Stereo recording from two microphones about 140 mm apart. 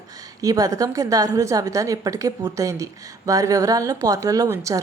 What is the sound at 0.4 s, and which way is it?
A woman's voice, 25° right (ahead or behind).